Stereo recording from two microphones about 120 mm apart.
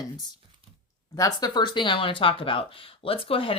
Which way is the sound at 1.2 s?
35° left (ahead or behind).